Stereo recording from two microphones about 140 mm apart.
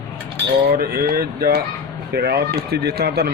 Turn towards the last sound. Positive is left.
turn(degrees=-90)